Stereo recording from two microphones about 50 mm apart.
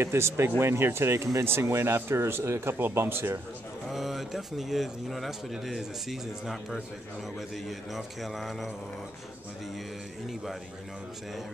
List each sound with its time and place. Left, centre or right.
0.0 s speech: right
3.9 s speech: centre
7.9 s speech: centre